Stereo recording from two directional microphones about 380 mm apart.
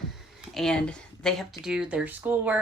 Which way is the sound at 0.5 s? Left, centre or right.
Centre.